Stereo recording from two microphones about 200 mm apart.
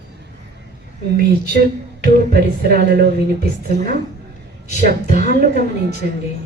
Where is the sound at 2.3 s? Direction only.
50° right (ahead or behind).